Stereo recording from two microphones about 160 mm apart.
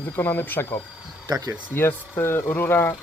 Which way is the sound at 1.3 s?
25° right (ahead or behind).